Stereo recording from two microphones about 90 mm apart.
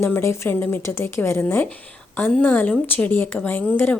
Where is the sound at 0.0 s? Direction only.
30° left (ahead or behind).